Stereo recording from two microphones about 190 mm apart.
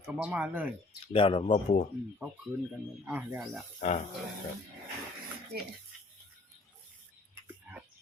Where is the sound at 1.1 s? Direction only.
25° left (ahead or behind).